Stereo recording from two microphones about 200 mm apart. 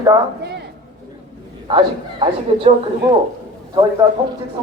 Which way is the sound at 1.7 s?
25° right (ahead or behind).